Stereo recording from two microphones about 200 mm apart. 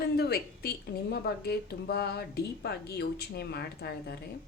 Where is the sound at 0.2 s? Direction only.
50° left (ahead or behind).